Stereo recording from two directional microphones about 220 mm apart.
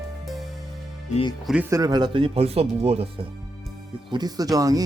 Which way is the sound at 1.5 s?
10° right (ahead or behind).